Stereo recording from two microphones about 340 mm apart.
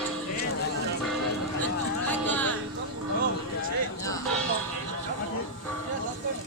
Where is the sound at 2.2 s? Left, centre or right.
Centre.